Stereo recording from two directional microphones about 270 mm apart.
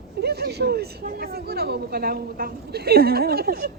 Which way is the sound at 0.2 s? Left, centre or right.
Right.